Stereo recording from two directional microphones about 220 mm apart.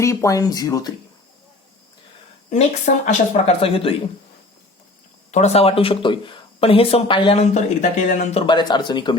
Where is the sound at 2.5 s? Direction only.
35° left (ahead or behind).